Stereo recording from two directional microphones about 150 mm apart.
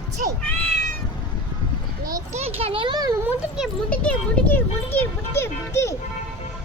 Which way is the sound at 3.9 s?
10° left (ahead or behind).